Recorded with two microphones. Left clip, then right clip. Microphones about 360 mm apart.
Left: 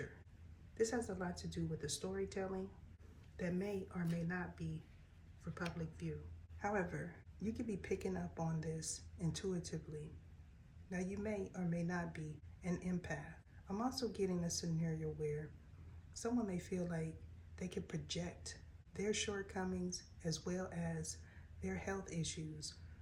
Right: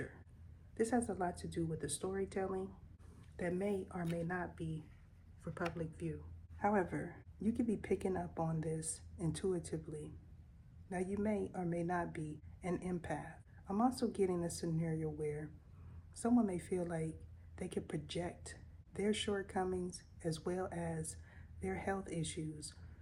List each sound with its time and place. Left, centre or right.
0.8 s a woman's voice: centre
16.2 s a woman's voice: centre